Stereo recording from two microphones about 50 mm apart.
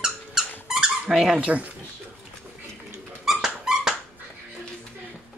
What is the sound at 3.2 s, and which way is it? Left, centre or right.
Dog, centre.